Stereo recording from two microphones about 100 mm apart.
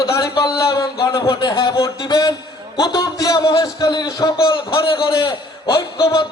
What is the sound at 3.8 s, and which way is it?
Speech, 45° left (ahead or behind).